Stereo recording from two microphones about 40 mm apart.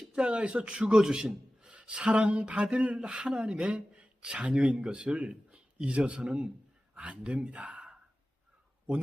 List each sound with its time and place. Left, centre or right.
0.1 s a man's voice: right